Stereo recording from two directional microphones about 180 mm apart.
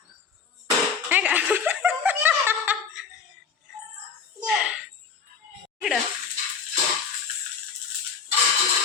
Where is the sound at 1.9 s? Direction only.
10° right (ahead or behind).